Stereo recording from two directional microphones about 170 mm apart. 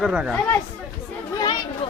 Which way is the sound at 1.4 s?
25° left (ahead or behind).